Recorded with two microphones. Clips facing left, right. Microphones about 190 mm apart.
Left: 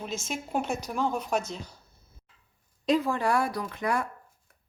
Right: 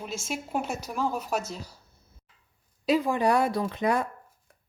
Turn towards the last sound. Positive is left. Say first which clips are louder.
# right 3 dB
turn(degrees=-20)  # may be behind; listen again after turning